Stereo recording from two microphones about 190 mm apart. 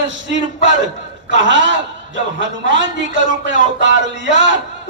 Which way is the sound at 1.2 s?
75° right (ahead or behind).